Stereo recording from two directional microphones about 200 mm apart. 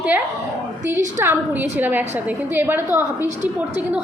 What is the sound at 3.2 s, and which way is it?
Speech, 35° right (ahead or behind).